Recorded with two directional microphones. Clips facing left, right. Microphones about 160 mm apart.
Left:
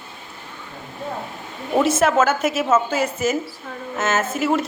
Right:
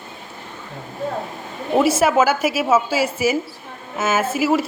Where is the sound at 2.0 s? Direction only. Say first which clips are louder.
Right 1 dB; 10° right (ahead or behind).